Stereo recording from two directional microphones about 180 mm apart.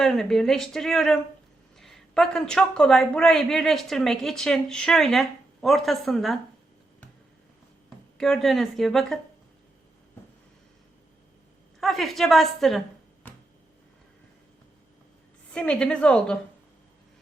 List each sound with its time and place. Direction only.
0.0 s speech: centre (ahead or behind)
7.9 s speech: centre (ahead or behind)
11.8 s speech: centre (ahead or behind)
15.5 s speech: 5° left (ahead or behind)